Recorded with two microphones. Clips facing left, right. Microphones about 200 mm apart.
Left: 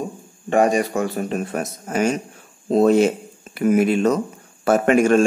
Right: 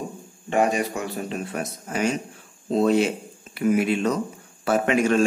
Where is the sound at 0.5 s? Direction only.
50° left (ahead or behind).